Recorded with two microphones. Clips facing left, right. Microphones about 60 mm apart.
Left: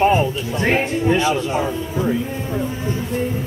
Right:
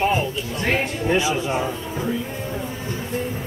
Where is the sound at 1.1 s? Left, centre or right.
Centre.